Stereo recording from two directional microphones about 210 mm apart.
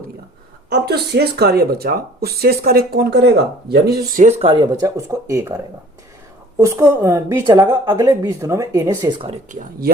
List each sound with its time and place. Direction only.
0.7 s speech: 50° right (ahead or behind); by 5.5 s 15° right (ahead or behind)
6.6 s a woman's voice: 15° right (ahead or behind); by 9.9 s 35° right (ahead or behind)